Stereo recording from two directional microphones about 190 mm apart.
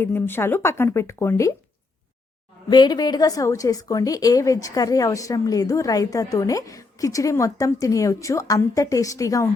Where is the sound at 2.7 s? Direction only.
20° left (ahead or behind).